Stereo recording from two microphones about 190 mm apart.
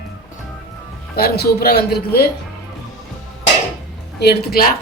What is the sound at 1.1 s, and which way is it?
A man's voice, 55° left (ahead or behind).